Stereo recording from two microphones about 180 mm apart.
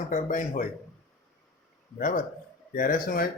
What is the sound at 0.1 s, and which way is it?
Speech, 45° left (ahead or behind).